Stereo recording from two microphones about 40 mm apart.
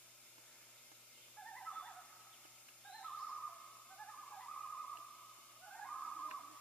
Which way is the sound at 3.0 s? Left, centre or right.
Centre.